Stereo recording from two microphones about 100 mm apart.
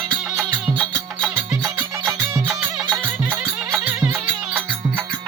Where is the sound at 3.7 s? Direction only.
20° right (ahead or behind).